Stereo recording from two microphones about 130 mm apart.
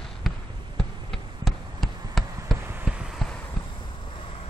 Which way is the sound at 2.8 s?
5° right (ahead or behind).